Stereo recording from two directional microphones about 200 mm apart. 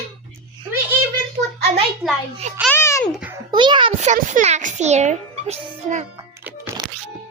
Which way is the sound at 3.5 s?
25° right (ahead or behind).